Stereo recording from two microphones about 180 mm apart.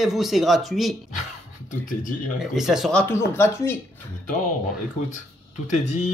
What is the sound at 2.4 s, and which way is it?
Speech, centre (ahead or behind).